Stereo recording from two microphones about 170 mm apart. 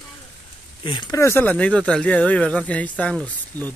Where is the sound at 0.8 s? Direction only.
25° left (ahead or behind).